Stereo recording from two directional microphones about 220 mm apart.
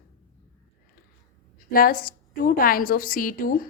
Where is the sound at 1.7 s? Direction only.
40° left (ahead or behind).